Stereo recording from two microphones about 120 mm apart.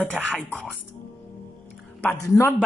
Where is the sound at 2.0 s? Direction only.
20° left (ahead or behind).